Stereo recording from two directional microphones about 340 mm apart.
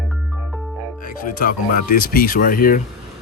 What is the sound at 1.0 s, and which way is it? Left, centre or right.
Speech, left.